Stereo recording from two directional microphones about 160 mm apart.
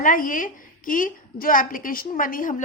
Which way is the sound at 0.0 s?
55° left (ahead or behind).